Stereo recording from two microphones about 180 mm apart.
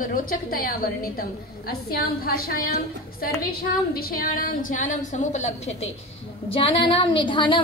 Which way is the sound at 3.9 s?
55° left (ahead or behind).